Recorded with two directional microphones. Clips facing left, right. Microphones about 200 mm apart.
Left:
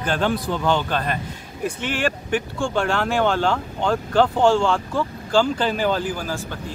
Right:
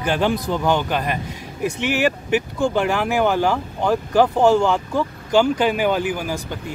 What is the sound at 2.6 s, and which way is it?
Speech, 10° right (ahead or behind).